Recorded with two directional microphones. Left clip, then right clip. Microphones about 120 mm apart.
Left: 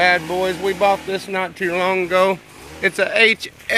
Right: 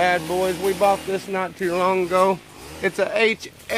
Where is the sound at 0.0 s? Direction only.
20° left (ahead or behind).